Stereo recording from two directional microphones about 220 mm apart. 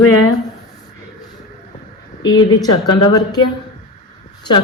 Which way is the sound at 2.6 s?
20° left (ahead or behind).